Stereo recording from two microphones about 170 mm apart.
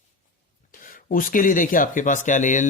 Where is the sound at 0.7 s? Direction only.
55° left (ahead or behind).